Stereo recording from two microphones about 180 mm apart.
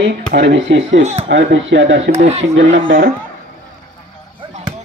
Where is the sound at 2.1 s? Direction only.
35° right (ahead or behind).